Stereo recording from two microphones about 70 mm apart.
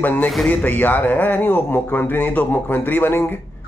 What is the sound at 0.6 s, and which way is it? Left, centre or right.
A man's voice, left.